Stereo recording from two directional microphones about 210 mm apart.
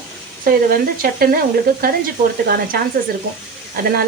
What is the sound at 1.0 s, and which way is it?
Speech, 45° right (ahead or behind).